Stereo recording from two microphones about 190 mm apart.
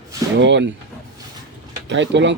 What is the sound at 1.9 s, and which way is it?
Speech, 70° right (ahead or behind).